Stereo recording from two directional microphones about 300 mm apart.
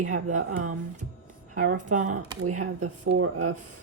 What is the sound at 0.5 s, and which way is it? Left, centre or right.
Speech, right.